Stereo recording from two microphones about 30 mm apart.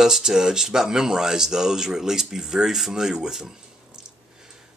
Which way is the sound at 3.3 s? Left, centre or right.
Centre.